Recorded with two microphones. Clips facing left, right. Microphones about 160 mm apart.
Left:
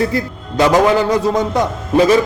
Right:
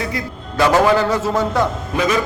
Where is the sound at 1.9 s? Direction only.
30° left (ahead or behind).